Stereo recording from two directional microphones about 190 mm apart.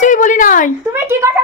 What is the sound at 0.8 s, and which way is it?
Speech, 10° right (ahead or behind).